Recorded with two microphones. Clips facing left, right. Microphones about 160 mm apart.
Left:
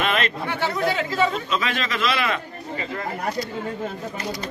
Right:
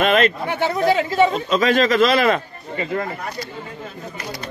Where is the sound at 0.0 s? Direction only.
45° right (ahead or behind).